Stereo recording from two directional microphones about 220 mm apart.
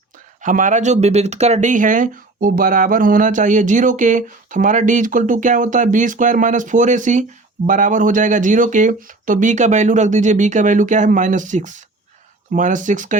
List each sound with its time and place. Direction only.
0.4 s speech: 35° right (ahead or behind)